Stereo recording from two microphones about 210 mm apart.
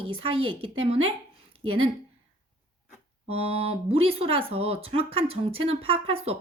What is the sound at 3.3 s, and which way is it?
Speech, 30° right (ahead or behind).